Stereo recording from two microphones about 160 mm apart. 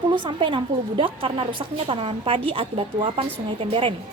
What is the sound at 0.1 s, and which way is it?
A woman's voice, 30° right (ahead or behind).